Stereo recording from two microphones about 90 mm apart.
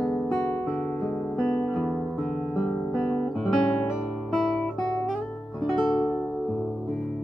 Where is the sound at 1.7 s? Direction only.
5° left (ahead or behind).